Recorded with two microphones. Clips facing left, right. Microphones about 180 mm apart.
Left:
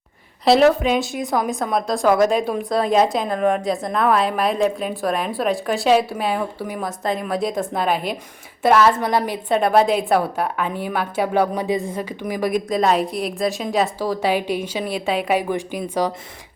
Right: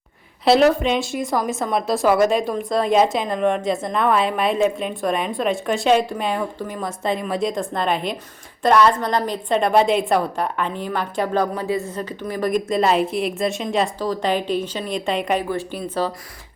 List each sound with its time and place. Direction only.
0.4 s a woman's voice: centre (ahead or behind)